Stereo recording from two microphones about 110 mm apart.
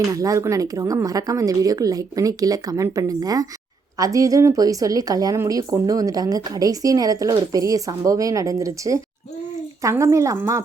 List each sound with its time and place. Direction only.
0.1 s a woman's voice: 30° right (ahead or behind)